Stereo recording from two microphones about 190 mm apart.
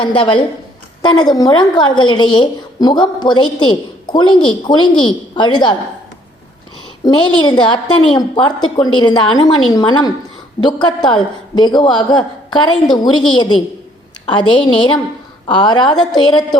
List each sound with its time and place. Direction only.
0.0 s a woman's voice: 25° left (ahead or behind)
7.0 s a woman's voice: 25° left (ahead or behind)